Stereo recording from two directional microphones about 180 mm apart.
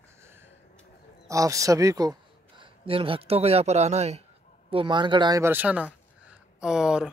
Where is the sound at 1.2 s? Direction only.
20° right (ahead or behind).